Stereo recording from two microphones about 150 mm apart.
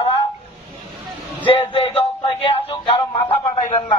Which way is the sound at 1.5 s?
40° left (ahead or behind).